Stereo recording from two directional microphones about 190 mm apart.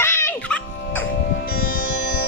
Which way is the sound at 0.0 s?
15° left (ahead or behind).